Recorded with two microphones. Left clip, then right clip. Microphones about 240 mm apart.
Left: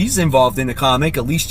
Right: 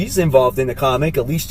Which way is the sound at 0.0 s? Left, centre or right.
Left.